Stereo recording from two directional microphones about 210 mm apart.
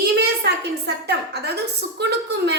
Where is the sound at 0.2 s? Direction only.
50° right (ahead or behind).